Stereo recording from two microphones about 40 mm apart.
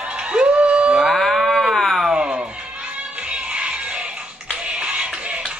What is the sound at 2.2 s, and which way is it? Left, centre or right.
Music, right.